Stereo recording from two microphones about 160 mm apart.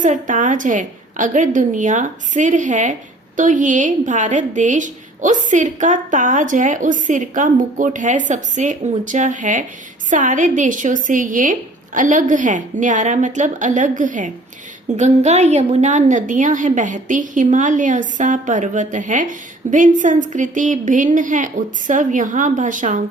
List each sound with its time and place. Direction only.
0.0 s a woman's voice: 50° right (ahead or behind)